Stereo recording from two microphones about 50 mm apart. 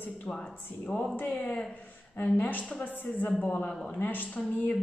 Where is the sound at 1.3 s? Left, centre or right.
Left.